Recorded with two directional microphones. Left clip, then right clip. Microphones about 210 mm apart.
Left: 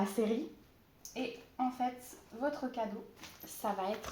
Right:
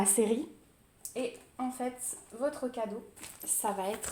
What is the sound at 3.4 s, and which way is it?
Speech, 50° right (ahead or behind).